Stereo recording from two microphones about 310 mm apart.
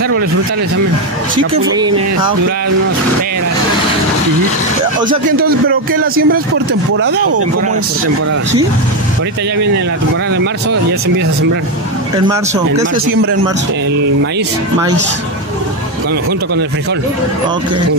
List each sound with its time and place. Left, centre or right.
1.8 s speech: centre
5.4 s speech: right